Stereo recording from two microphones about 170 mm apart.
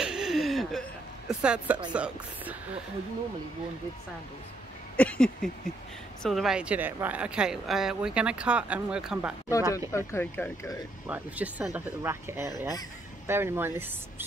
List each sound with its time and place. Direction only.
0.0 s a sound: 5° right (ahead or behind)
2.0 s speech: 5° right (ahead or behind)
4.9 s a sound: 10° left (ahead or behind)
6.2 s speech: centre (ahead or behind)
9.5 s speech: 20° left (ahead or behind)
11.1 s speech: 10° right (ahead or behind)